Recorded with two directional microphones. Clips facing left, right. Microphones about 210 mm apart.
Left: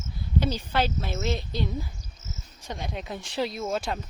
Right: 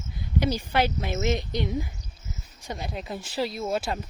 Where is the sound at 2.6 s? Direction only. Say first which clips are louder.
Right 1 dB; 5° right (ahead or behind).